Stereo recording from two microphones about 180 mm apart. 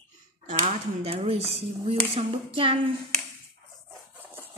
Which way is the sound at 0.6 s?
30° right (ahead or behind).